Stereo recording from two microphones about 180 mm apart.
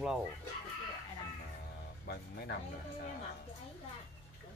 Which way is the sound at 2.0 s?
60° left (ahead or behind).